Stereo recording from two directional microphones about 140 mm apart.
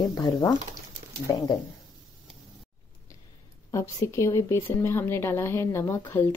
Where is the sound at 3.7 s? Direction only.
25° left (ahead or behind).